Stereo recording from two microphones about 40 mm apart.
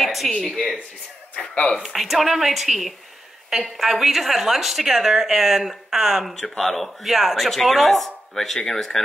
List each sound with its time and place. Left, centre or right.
0.0 s speech: centre
0.3 s speech: centre
1.5 s speech: left
1.8 s a woman's voice: centre
6.6 s speech: centre